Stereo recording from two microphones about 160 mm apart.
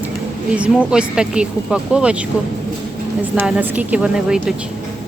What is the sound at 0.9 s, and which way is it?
A woman's voice, 5° right (ahead or behind).